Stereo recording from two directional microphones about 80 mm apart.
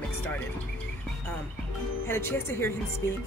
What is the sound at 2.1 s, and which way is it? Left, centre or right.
Speech, left.